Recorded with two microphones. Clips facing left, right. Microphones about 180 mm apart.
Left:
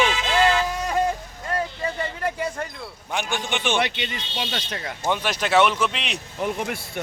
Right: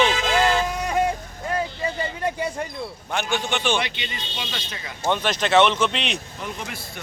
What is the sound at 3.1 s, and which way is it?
Speech, 15° left (ahead or behind).